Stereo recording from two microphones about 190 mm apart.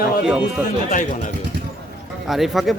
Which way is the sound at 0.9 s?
45° left (ahead or behind).